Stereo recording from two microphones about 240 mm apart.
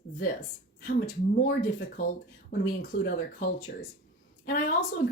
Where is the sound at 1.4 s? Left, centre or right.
Left.